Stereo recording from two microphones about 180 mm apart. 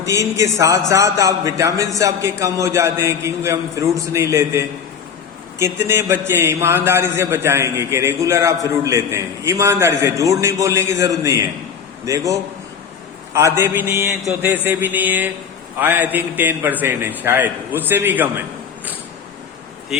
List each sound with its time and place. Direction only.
0.0 s a man's voice: 15° right (ahead or behind)
19.9 s speech: centre (ahead or behind)